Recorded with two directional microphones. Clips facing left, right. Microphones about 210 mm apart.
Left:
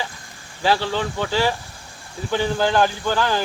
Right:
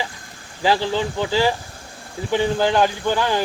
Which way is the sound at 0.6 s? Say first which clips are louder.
Right 1 dB; 15° right (ahead or behind).